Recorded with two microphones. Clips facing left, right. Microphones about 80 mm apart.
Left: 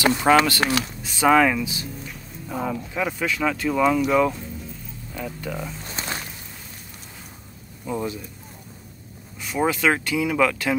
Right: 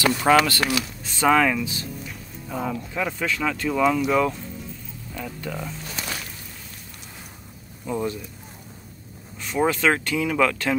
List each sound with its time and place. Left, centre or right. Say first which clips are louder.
0.0 s speech: left 1 dB; centre
5.9 s a sound: left 1 dB; left
7.8 s speech: right 1 dB; centre
9.4 s speech: even; centre